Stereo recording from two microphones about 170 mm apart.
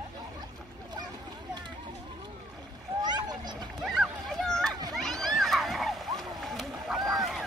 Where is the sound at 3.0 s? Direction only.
25° right (ahead or behind).